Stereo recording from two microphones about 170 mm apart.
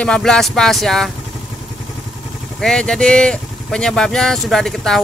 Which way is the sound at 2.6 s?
5° left (ahead or behind).